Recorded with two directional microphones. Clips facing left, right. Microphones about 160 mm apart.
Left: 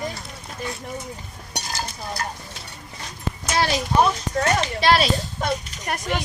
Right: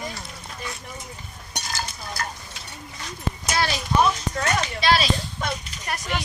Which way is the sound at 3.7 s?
40° left (ahead or behind).